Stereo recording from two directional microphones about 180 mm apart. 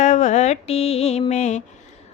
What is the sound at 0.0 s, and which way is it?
Music, 40° left (ahead or behind).